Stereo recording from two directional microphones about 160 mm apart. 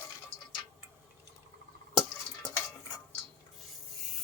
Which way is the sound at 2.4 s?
20° left (ahead or behind).